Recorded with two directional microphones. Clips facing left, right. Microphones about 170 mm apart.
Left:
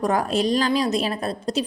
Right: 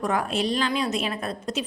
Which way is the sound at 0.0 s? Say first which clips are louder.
Left 4 dB; 40° left (ahead or behind).